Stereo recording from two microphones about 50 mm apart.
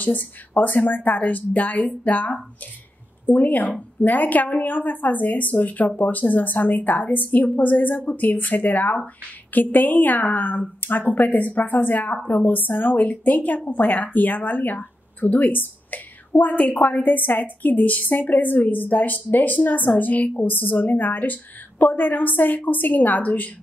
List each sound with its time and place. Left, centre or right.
0.0 s speech: left